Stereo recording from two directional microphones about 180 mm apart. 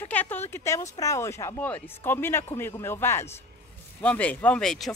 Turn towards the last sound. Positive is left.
turn(degrees=5)  # may be behind; listen again after turning